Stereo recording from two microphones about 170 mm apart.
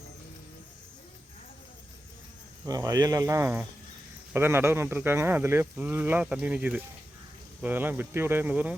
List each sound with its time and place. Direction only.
2.6 s speech: 20° right (ahead or behind)